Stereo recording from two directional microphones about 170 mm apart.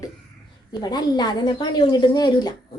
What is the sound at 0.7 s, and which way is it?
A woman's voice, 25° left (ahead or behind).